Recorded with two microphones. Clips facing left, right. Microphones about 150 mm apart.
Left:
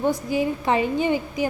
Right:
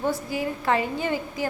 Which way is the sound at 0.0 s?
20° left (ahead or behind).